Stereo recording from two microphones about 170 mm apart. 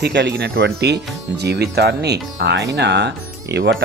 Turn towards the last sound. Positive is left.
turn(degrees=-85)